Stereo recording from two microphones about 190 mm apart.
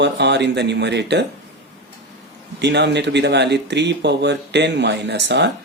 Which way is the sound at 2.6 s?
65° right (ahead or behind).